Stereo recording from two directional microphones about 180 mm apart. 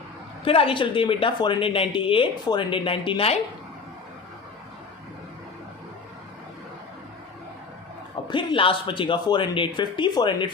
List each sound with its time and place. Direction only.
0.4 s speech: 30° left (ahead or behind)
8.3 s speech: 25° left (ahead or behind)